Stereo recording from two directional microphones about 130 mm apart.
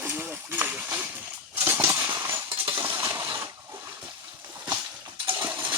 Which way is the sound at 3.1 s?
35° right (ahead or behind).